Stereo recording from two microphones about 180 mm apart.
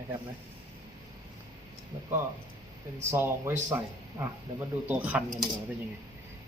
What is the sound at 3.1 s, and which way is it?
Speech, 15° right (ahead or behind).